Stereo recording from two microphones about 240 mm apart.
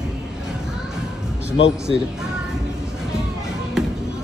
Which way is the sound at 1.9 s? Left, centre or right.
Left.